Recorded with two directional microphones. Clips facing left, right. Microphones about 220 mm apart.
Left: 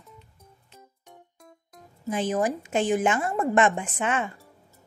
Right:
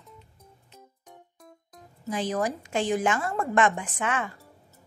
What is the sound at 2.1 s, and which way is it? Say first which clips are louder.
A woman's voice: left 3 dB; 20° left (ahead or behind).